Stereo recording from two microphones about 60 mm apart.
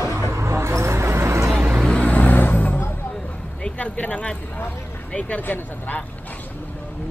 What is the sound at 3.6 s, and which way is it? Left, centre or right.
Speech, left.